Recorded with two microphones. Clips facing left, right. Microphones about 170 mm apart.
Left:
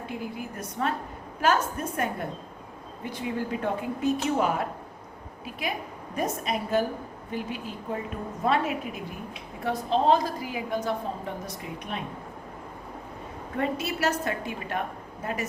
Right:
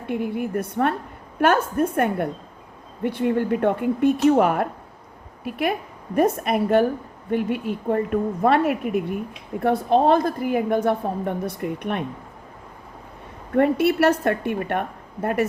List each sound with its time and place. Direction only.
0.0 s a woman's voice: 60° right (ahead or behind)
13.6 s a woman's voice: 60° right (ahead or behind)